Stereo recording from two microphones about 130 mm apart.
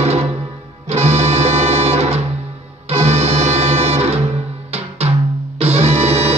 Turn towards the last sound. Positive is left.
turn(degrees=-55)  # may be behind; listen again after turning